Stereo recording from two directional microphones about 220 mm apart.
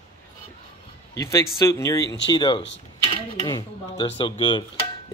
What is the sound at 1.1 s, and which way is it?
Speech, 15° left (ahead or behind).